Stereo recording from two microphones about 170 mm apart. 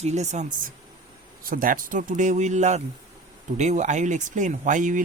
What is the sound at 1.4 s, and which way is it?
Speech, 55° right (ahead or behind).